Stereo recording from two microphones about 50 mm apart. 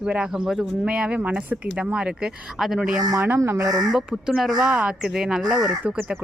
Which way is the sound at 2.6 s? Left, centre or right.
Centre.